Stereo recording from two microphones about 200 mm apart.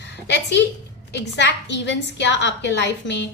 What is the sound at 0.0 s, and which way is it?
A woman's voice, 60° left (ahead or behind).